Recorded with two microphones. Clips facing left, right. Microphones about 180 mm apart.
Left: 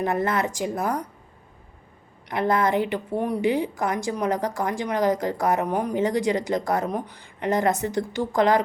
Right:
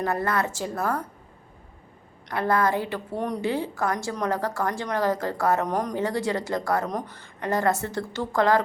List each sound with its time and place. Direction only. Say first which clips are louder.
0.0 s a woman's voice: left 2 dB; 20° left (ahead or behind)
2.3 s a woman's voice: left 2 dB; 20° left (ahead or behind)
3.2 s a woman's voice: left 4 dB; 5° left (ahead or behind)